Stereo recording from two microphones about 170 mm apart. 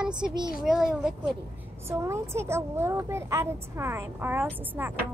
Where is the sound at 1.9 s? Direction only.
15° right (ahead or behind).